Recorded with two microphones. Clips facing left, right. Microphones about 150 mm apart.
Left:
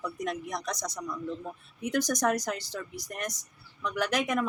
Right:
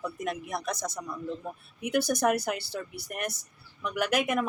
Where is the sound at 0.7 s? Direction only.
55° right (ahead or behind).